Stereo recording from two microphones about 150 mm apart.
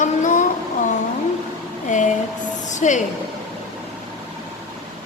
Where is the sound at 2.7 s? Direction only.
55° left (ahead or behind).